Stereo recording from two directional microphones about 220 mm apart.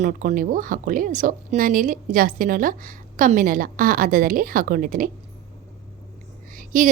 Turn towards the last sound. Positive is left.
turn(degrees=-35)  # may be behind; listen again after turning